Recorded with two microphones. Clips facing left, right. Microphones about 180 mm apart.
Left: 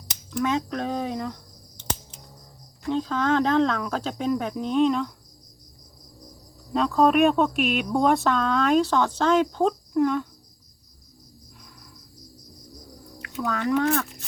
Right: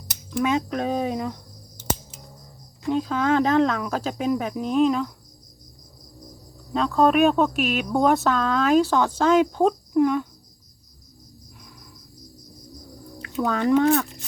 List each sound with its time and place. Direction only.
0.3 s speech: 10° right (ahead or behind)
1.8 s finger snapping: 10° right (ahead or behind)
2.9 s speech: 10° right (ahead or behind)
6.7 s speech: centre (ahead or behind)
13.1 s speech: 30° right (ahead or behind)